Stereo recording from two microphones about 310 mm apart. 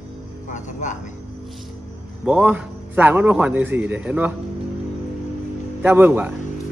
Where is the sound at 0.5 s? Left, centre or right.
Left.